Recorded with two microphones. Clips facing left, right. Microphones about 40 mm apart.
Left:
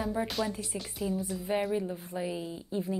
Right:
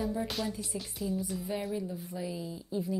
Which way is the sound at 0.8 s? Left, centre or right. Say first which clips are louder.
Left 2 dB; centre.